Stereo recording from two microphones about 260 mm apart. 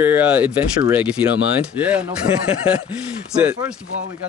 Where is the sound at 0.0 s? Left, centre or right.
Centre.